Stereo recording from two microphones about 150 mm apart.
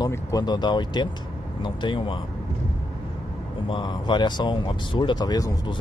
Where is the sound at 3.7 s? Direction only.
30° left (ahead or behind).